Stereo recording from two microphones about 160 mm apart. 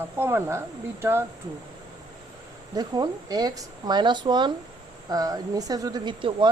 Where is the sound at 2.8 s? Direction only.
25° right (ahead or behind).